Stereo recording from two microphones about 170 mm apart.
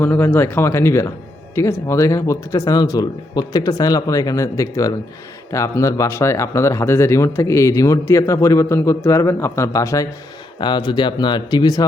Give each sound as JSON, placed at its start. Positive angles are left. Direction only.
{"t": 0.0, "sound": "speech", "side_deg": 10}